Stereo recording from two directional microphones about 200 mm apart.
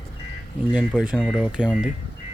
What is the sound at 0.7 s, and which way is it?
Speech, 5° right (ahead or behind).